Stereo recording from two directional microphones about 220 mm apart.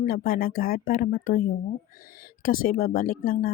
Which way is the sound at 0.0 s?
40° left (ahead or behind).